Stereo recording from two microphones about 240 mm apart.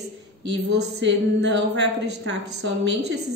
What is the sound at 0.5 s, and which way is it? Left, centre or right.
Speech, right.